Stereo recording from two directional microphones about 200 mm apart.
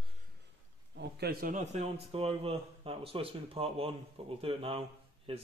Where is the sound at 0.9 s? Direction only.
50° right (ahead or behind).